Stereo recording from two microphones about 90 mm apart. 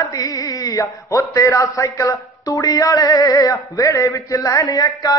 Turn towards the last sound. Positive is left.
turn(degrees=45)  # may be behind; listen again after turning